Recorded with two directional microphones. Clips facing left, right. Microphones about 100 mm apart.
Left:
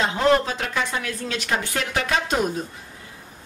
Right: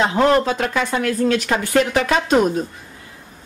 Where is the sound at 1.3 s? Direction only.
60° right (ahead or behind).